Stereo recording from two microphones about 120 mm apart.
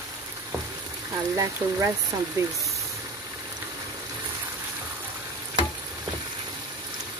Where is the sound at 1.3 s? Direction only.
25° right (ahead or behind).